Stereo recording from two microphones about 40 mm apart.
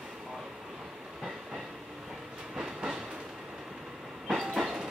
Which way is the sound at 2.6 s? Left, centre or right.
Right.